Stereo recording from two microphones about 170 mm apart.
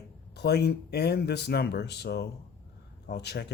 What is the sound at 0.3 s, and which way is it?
Speech, 75° left (ahead or behind).